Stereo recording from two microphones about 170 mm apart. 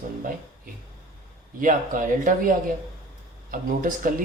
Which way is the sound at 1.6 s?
50° right (ahead or behind).